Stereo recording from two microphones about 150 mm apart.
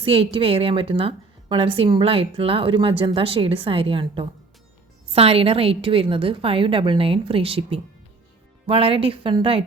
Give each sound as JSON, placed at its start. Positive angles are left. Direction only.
{"t": 0.0, "sound": "a woman's voice", "side_deg": -40}